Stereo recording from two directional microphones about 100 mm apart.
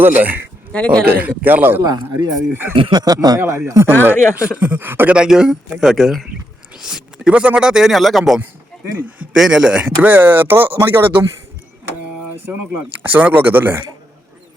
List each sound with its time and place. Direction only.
0.0 s speech: 15° right (ahead or behind)
0.7 s speech: 10° left (ahead or behind)
1.1 s speech: 20° right (ahead or behind)
1.8 s speech: 40° right (ahead or behind)
2.5 s speech: 25° right (ahead or behind)
2.9 s speech: 40° right (ahead or behind)
3.4 s speech: 30° right (ahead or behind)
4.0 s speech: 15° right (ahead or behind)
5.1 s a man's voice: 10° right (ahead or behind)
9.0 s speech: 15° right (ahead or behind)
13.0 s speech: 15° right (ahead or behind)